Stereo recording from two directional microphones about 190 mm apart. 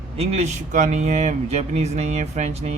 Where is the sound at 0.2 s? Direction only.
35° right (ahead or behind).